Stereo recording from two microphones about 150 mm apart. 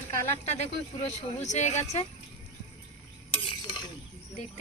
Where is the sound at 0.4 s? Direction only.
50° left (ahead or behind).